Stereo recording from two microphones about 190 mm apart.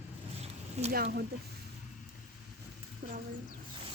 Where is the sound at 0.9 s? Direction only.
55° right (ahead or behind).